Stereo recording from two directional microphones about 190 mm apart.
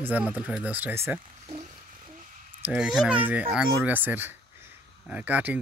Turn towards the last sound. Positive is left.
turn(degrees=-10)  # may be behind; listen again after turning